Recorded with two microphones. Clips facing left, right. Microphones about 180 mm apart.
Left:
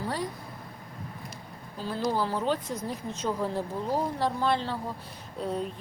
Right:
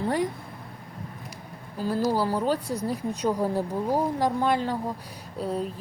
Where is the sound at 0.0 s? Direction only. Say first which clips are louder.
Right 6 dB; 20° right (ahead or behind).